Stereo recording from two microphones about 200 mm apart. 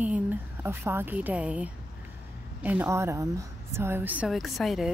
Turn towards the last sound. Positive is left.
turn(degrees=0)  # may be behind; listen again after turning